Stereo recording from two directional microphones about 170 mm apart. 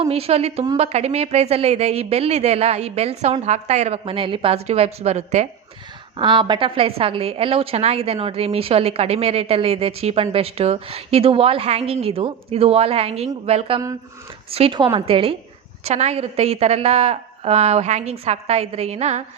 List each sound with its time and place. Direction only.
0.0 s a woman's voice: 35° right (ahead or behind)
6.1 s a woman's voice: 30° right (ahead or behind)